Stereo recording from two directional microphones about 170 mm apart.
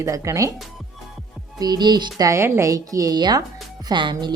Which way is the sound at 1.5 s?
25° right (ahead or behind).